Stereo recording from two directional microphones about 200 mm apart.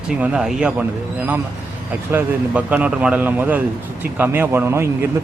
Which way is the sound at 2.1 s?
10° right (ahead or behind).